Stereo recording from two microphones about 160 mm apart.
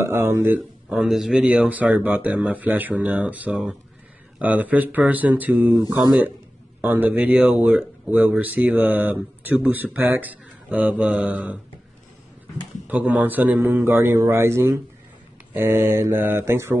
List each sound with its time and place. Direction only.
0.0 s speech: 15° right (ahead or behind)
0.9 s speech: centre (ahead or behind)
12.8 s speech: 10° right (ahead or behind)